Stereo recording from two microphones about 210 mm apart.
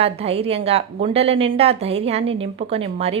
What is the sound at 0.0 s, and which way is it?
A woman's voice, 30° right (ahead or behind).